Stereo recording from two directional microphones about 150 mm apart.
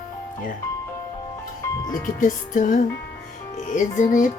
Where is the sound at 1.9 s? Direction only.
60° left (ahead or behind).